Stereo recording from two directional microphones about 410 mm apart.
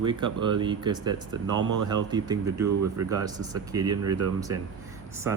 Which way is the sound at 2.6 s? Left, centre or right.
Right.